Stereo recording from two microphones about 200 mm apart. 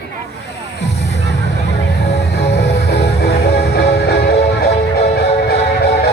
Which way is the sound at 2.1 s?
55° left (ahead or behind).